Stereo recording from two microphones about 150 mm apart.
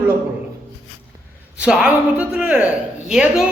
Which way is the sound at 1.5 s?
5° right (ahead or behind).